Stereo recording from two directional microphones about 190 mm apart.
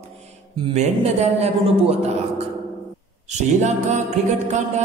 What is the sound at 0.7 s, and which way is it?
Music, 35° right (ahead or behind).